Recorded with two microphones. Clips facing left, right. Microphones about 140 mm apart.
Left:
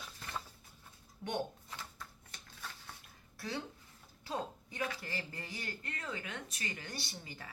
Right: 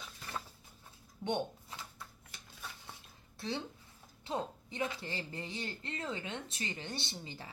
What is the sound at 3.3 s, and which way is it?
Speech, 25° right (ahead or behind).